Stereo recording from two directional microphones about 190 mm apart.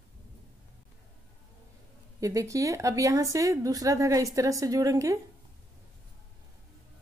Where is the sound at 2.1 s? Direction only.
15° right (ahead or behind).